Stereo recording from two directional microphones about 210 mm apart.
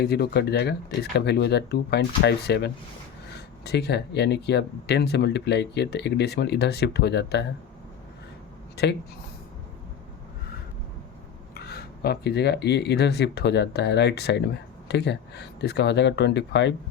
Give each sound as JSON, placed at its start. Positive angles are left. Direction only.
{"t": 0.0, "sound": "speech", "side_deg": 50}
{"t": 8.7, "sound": "a sound", "side_deg": 50}
{"t": 11.5, "sound": "speech", "side_deg": 50}